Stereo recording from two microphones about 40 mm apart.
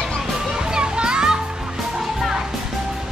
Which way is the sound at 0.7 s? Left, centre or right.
Right.